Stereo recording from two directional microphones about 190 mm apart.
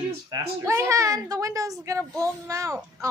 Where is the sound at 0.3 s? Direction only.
15° right (ahead or behind).